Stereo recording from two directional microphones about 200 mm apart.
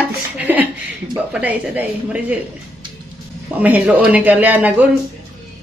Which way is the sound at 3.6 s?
5° right (ahead or behind).